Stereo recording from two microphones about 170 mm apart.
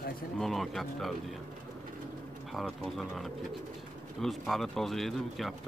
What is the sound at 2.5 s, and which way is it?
Speech, centre (ahead or behind).